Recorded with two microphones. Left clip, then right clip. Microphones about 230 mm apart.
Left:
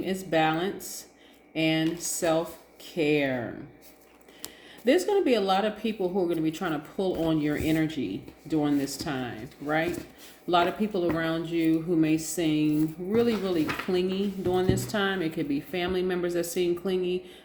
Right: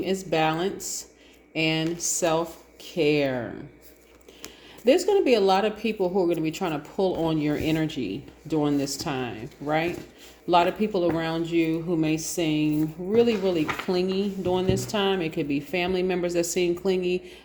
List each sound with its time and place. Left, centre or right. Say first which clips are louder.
0.0 s speech: right 1 dB; right
4.9 s speech: right 3 dB; right